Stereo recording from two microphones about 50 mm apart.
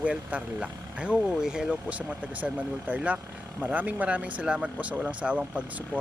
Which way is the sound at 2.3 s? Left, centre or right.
Right.